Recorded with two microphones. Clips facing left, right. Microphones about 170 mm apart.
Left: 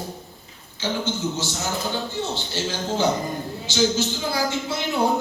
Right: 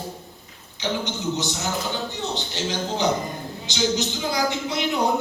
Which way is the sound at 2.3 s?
15° right (ahead or behind).